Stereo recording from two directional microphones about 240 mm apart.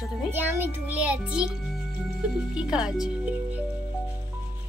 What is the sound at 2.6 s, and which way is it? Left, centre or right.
Speech, centre.